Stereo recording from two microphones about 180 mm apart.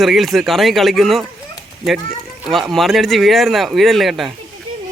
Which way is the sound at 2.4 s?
Centre (ahead or behind).